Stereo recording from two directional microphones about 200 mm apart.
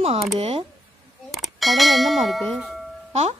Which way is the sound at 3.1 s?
30° right (ahead or behind).